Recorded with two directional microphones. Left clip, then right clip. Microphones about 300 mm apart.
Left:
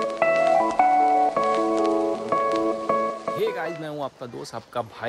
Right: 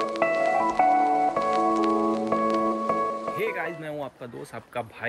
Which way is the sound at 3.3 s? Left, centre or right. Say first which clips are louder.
Left 2 dB; centre.